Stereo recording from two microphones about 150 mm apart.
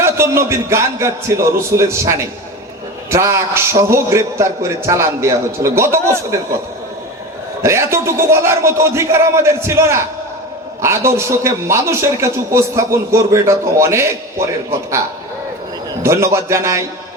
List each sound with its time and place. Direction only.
0.0 s a man's voice: 15° right (ahead or behind)
7.6 s a man's voice: 20° right (ahead or behind)
16.0 s a man's voice: 20° right (ahead or behind)